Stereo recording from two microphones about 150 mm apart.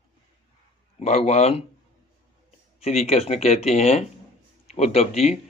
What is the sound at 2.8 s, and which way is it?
A man's voice, 45° left (ahead or behind).